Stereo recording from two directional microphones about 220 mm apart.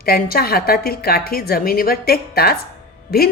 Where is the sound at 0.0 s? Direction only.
45° left (ahead or behind).